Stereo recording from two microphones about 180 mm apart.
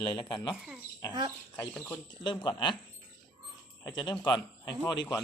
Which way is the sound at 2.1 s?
25° left (ahead or behind).